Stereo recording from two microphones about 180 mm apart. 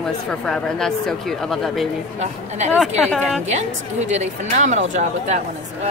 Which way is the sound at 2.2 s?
40° right (ahead or behind).